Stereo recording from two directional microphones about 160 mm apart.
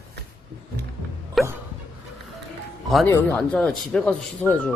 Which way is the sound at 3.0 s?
10° left (ahead or behind).